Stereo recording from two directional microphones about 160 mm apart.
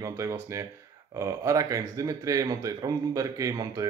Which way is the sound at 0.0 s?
20° right (ahead or behind).